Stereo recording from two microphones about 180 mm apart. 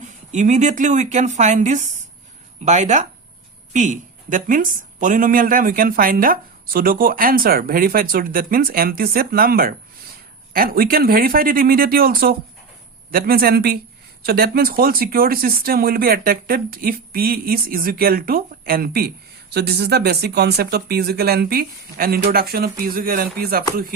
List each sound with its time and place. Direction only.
0.0 s a woman's voice: 40° right (ahead or behind)